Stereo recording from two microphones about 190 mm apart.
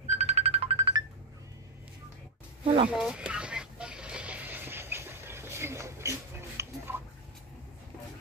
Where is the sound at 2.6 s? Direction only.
30° right (ahead or behind).